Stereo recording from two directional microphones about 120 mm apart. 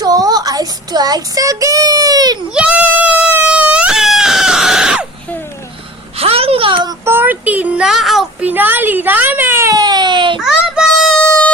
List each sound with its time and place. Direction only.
0.0 s child singing: 35° right (ahead or behind)
2.5 s goat: 10° right (ahead or behind)
6.1 s a sound: 55° right (ahead or behind)
7.0 s a sound: 20° right (ahead or behind); by 8.4 s centre (ahead or behind)
8.4 s baby cry: 15° right (ahead or behind); by 10.4 s 40° right (ahead or behind)
10.4 s child singing: 5° right (ahead or behind)
11.2 s music: 10° left (ahead or behind)